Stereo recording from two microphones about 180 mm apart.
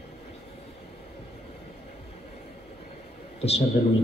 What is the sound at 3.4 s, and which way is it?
Speech, 35° left (ahead or behind).